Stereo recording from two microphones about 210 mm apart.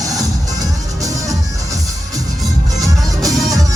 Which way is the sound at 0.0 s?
15° right (ahead or behind).